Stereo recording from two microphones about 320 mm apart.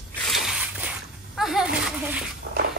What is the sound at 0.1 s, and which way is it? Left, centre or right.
Splash, centre.